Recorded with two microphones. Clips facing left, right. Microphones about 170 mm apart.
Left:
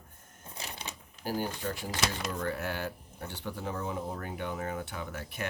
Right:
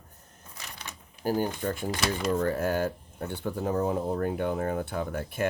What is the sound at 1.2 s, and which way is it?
Speech, 50° right (ahead or behind).